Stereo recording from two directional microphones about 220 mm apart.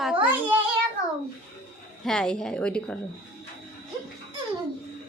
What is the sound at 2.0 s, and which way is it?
Speech, 5° left (ahead or behind).